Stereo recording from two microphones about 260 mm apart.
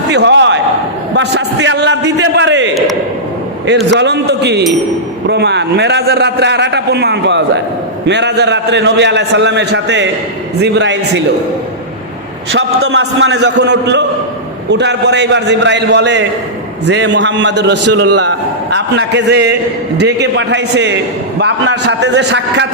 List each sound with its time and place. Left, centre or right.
0.1 s a sound: right
1.1 s a man's voice: right
3.9 s a man's voice: right
12.5 s a man's voice: right